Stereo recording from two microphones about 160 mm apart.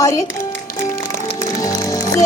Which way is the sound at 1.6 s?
25° left (ahead or behind).